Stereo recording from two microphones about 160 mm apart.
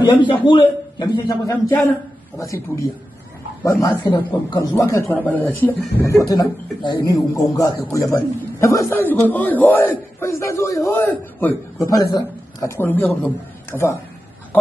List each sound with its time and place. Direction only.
0.3 s a man's voice: 30° left (ahead or behind)
4.1 s a man's voice: 25° left (ahead or behind); by 11.9 s 10° left (ahead or behind)
11.9 s speech: 20° left (ahead or behind)